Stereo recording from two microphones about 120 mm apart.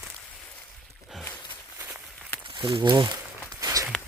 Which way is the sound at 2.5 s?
45° right (ahead or behind).